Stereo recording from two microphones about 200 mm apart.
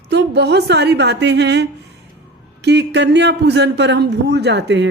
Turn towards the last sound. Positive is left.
turn(degrees=-60)  # may be behind; listen again after turning